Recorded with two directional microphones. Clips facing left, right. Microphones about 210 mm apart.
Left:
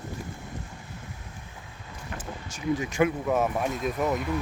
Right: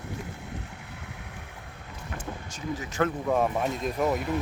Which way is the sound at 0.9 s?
65° right (ahead or behind).